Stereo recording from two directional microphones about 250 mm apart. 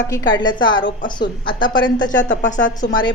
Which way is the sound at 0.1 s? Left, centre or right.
Centre.